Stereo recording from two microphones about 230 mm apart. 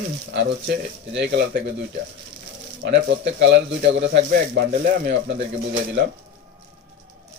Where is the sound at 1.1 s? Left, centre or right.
Right.